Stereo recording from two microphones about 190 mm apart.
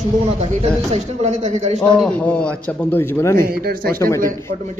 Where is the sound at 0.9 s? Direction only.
35° right (ahead or behind).